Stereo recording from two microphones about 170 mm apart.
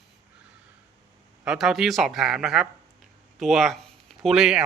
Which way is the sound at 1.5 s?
Centre (ahead or behind).